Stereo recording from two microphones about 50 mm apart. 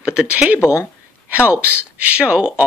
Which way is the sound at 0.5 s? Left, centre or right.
Left.